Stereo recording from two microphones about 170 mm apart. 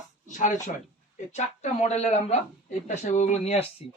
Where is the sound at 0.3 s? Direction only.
45° left (ahead or behind).